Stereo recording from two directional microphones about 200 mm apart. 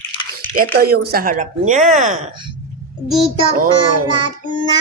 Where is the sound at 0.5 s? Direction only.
50° right (ahead or behind).